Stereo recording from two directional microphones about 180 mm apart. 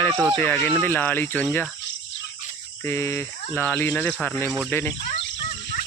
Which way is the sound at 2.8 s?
15° left (ahead or behind).